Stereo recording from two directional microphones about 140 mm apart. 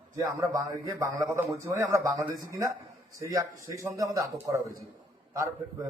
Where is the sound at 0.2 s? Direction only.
25° right (ahead or behind).